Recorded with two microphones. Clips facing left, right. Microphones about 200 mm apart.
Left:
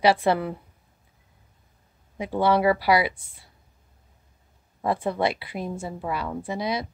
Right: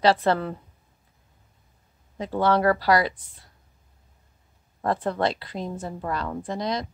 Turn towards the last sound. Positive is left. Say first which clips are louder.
# even
turn(degrees=10)  # may be behind; listen again after turning